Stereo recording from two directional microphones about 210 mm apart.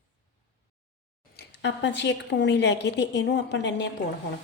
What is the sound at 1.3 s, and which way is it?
A woman's voice, 50° left (ahead or behind).